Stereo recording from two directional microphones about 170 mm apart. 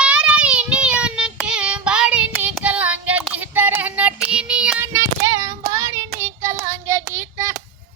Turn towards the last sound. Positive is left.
turn(degrees=-15)  # may be behind; listen again after turning